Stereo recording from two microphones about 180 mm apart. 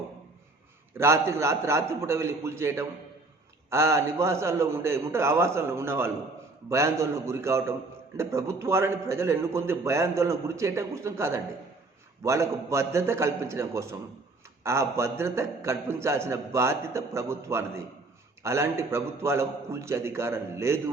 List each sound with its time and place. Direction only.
0.9 s a man's voice: 15° right (ahead or behind)